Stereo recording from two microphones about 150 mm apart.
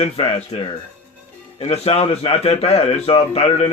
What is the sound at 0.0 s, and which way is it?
A man's voice, 35° left (ahead or behind).